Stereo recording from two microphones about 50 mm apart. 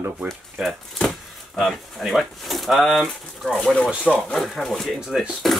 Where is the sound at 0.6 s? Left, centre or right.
Centre.